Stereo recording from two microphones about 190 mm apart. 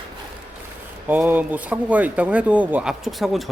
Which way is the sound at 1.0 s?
10° right (ahead or behind).